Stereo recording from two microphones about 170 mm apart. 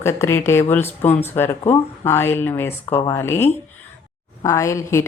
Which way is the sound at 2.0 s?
15° left (ahead or behind).